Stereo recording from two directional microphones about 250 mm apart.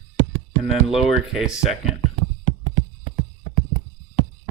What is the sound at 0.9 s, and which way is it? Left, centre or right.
Speech, centre.